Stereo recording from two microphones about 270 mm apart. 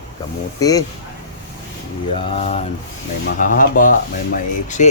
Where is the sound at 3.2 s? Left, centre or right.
Left.